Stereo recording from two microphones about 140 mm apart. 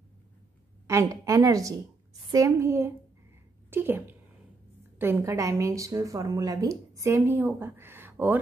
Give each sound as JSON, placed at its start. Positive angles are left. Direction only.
{"t": 0.8, "sound": "a woman's voice", "side_deg": -20}